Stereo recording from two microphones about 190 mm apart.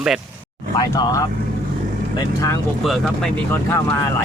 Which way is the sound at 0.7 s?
20° left (ahead or behind).